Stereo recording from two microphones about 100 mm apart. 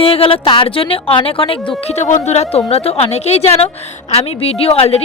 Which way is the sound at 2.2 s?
90° left.